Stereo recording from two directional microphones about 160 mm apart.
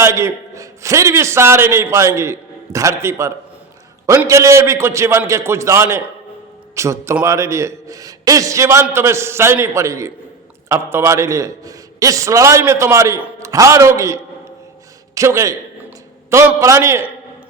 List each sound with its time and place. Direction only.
0.0 s a man's voice: 15° right (ahead or behind)